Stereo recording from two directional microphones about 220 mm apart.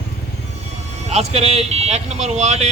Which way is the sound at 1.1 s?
30° right (ahead or behind).